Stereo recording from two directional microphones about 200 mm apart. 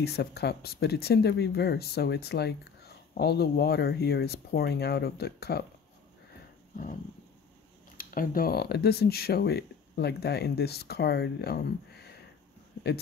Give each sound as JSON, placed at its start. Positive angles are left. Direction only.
{"t": 0.0, "sound": "speech", "side_deg": 55}
{"t": 8.0, "sound": "speech", "side_deg": 45}